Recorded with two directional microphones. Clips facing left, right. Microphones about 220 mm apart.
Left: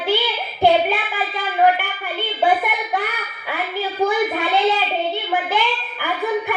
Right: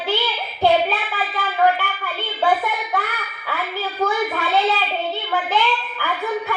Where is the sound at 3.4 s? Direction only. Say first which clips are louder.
Left 2 dB; 15° left (ahead or behind).